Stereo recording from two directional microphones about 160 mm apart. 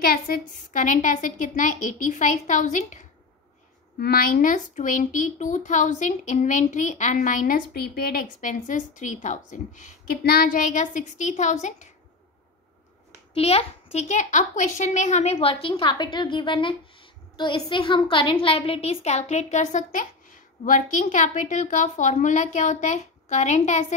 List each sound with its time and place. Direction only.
0.0 s a woman's voice: 70° left (ahead or behind); by 3.0 s 50° left (ahead or behind)
4.0 s a woman's voice: 65° left (ahead or behind); by 10.1 s 50° left (ahead or behind)
10.2 s a woman's voice: 70° left (ahead or behind); by 11.9 s 50° left (ahead or behind)
13.3 s a woman's voice: 40° left (ahead or behind)
15.3 s a woman's voice: 35° left (ahead or behind)